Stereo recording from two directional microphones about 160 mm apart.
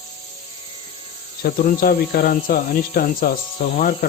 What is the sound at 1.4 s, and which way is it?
Speech, 65° left (ahead or behind).